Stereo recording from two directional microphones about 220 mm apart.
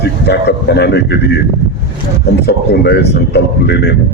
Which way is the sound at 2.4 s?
50° left (ahead or behind).